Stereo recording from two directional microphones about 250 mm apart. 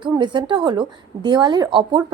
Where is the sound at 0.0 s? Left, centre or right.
Centre.